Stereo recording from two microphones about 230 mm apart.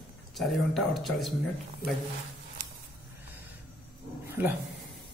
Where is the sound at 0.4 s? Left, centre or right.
Centre.